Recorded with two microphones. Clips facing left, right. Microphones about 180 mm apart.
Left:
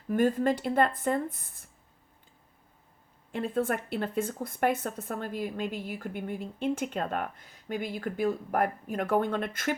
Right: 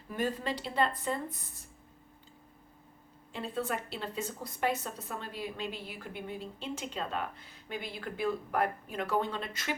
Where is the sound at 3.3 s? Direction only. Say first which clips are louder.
Left 6 dB; 50° left (ahead or behind).